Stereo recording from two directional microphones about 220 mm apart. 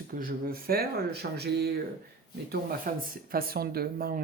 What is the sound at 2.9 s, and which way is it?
A woman's voice, 40° right (ahead or behind).